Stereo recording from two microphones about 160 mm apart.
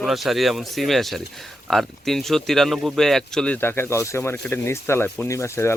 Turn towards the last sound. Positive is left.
turn(degrees=15)  # may be behind; listen again after turning